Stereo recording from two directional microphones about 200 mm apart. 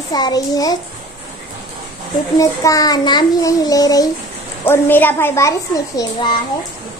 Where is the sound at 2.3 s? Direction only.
15° left (ahead or behind).